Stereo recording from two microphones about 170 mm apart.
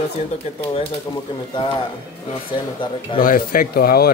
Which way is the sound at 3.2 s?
55° left (ahead or behind).